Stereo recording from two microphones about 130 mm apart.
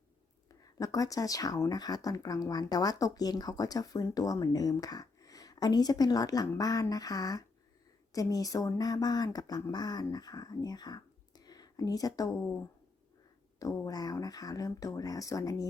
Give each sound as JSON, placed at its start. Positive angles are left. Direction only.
{"t": 0.4, "sound": "speech", "side_deg": 30}